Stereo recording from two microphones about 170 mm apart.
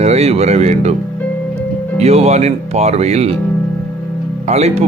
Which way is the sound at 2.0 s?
40° right (ahead or behind).